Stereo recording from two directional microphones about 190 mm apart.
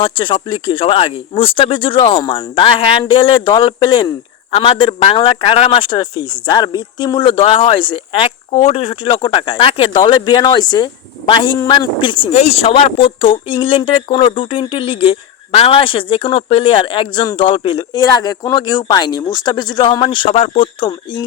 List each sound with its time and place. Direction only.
0.0 s speech: 25° left (ahead or behind)